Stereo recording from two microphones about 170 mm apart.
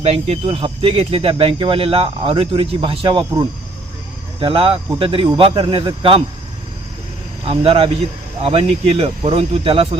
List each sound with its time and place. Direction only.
0.0 s speech: 35° right (ahead or behind)
7.4 s speech: 35° right (ahead or behind)